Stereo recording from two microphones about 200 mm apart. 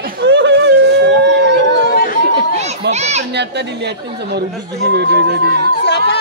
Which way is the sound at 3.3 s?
60° right (ahead or behind).